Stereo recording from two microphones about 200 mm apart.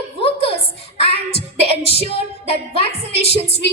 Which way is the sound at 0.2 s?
30° left (ahead or behind).